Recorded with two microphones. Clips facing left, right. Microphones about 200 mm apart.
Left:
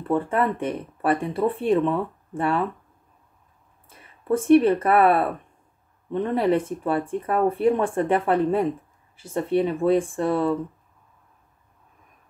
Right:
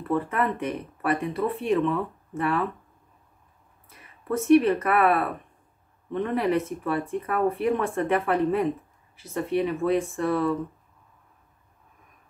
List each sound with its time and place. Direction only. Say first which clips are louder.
0.1 s speech: left 3 dB; 30° left (ahead or behind)
3.9 s speech: left 5 dB; 30° left (ahead or behind)